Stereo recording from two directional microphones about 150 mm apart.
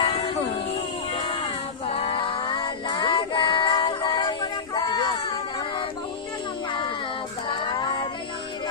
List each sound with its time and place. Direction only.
0.0 s music: 35° left (ahead or behind)
1.1 s child singing: 35° left (ahead or behind)
1.9 s female singing: 40° left (ahead or behind)
7.4 s music: 30° left (ahead or behind)